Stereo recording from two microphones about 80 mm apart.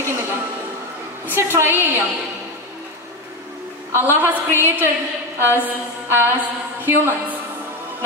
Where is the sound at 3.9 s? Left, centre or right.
Right.